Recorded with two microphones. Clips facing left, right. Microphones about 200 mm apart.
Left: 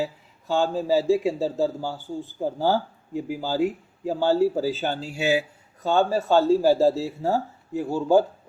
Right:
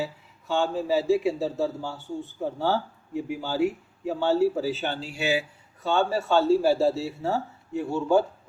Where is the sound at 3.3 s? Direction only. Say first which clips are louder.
Left 1 dB; 35° left (ahead or behind).